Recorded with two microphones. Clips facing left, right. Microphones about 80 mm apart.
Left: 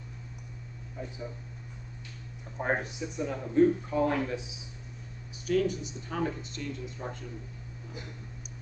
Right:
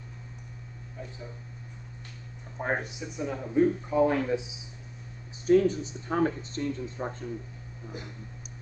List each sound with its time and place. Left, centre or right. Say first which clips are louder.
2.6 s speech: even; centre
5.5 s speech: right 6 dB; right